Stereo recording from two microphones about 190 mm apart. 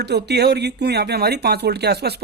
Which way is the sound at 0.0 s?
60° right (ahead or behind).